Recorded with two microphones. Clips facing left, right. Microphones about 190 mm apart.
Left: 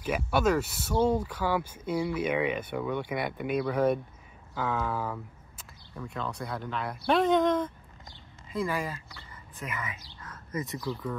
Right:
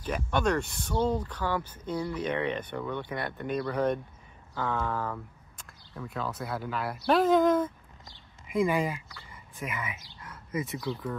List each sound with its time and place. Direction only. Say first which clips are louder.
0.0 s speech: left 2 dB; 10° left (ahead or behind)
8.5 s speech: right 5 dB; 15° right (ahead or behind)
10.2 s bird: right 2 dB; 10° right (ahead or behind)
10.9 s speech: even; centre (ahead or behind)